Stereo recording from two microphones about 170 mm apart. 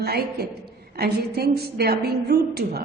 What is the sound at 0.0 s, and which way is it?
A woman's voice, 70° right (ahead or behind).